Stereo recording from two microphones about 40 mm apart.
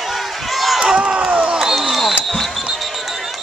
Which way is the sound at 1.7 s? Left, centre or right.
Centre.